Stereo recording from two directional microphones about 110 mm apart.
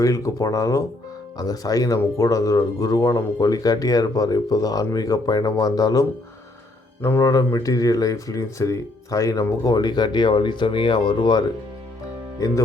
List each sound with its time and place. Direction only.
0.0 s speech: 30° left (ahead or behind)